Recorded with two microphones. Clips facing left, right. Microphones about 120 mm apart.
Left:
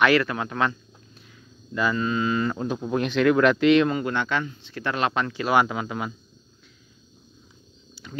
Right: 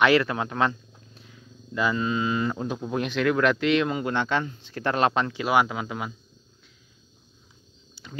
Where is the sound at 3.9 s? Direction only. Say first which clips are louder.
Left 1 dB; 20° right (ahead or behind).